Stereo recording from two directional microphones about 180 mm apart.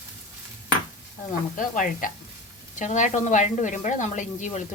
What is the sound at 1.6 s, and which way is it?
A woman's voice, 50° left (ahead or behind).